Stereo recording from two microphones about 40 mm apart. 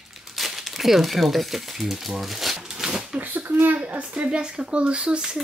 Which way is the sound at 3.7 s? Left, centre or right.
Right.